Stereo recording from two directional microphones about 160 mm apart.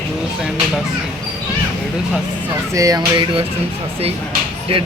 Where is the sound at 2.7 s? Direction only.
20° right (ahead or behind).